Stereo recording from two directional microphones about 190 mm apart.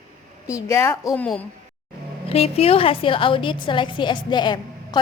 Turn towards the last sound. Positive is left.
turn(degrees=25)  # may be behind; listen again after turning